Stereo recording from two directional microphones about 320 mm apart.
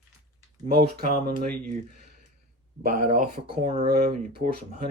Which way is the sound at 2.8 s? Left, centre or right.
Right.